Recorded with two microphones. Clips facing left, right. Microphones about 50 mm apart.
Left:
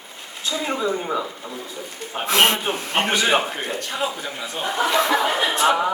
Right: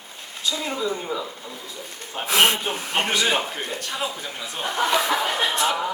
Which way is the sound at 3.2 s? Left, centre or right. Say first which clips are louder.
Left 3 dB; left.